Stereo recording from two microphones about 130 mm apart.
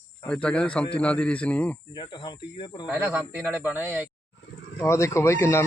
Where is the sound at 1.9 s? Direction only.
35° left (ahead or behind).